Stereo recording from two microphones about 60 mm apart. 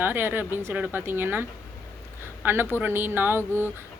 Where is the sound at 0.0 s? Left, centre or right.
Right.